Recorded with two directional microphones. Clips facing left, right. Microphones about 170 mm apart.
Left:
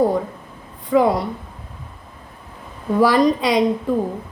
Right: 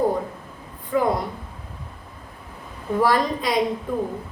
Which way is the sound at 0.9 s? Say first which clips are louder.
Left 6 dB; 90° left.